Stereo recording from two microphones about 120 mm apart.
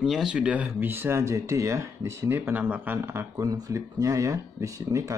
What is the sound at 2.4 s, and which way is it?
Speech, 15° right (ahead or behind).